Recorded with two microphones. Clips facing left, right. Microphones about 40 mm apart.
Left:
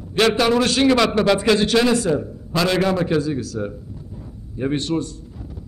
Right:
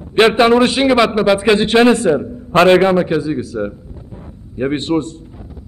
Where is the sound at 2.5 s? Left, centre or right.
Right.